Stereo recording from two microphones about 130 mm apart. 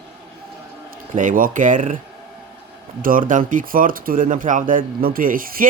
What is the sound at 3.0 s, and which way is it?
Speech, 90° right.